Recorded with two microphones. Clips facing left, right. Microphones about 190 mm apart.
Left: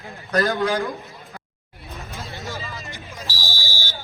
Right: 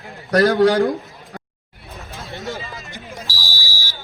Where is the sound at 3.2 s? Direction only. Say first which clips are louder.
Left 1 dB; 15° left (ahead or behind).